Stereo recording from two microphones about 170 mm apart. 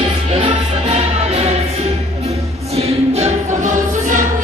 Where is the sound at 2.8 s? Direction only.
40° right (ahead or behind).